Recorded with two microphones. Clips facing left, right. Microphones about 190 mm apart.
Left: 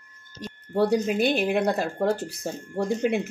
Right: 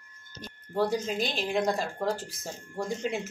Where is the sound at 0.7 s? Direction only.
65° left (ahead or behind).